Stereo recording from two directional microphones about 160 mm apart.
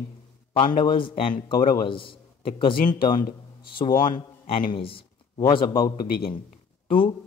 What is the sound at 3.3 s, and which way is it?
Speech, 30° left (ahead or behind).